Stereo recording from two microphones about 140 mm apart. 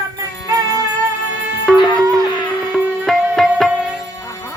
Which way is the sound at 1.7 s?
5° left (ahead or behind).